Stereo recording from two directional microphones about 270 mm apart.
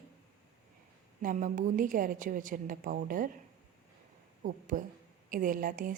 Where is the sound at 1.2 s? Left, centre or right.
Right.